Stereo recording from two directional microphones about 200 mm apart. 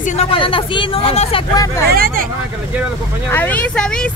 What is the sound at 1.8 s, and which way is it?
Speech, 50° right (ahead or behind).